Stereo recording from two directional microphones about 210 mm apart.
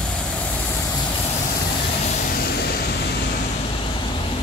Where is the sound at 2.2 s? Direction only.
45° left (ahead or behind).